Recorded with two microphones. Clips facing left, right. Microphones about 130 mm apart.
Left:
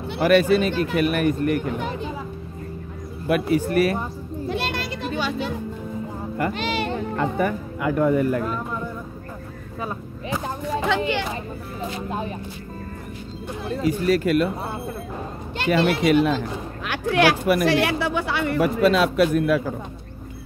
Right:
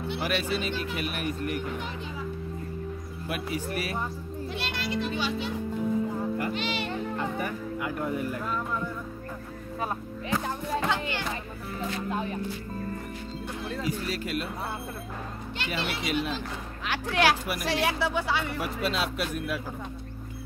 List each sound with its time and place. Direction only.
0.1 s speech: 50° left (ahead or behind)
3.3 s a child's voice: 55° left (ahead or behind)
8.5 s speech: 20° left (ahead or behind)
10.9 s speech: 75° left (ahead or behind)
11.3 s speech: 20° left (ahead or behind)
13.8 s speech: 55° left (ahead or behind)
14.5 s speech: 25° left (ahead or behind)
15.5 s speech: 50° left (ahead or behind)